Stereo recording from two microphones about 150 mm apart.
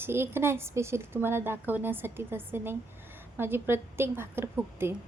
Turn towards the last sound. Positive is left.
turn(degrees=-15)  # may be behind; listen again after turning